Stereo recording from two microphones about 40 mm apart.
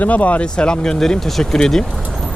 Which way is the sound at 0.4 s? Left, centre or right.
Left.